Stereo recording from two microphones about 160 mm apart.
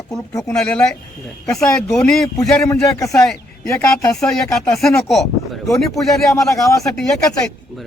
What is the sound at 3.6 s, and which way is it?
Speech, 15° left (ahead or behind).